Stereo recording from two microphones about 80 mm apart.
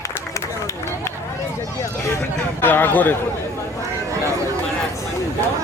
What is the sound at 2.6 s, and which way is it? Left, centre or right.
Speech, left.